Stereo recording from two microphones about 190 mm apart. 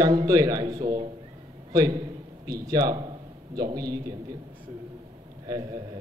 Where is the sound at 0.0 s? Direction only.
20° right (ahead or behind).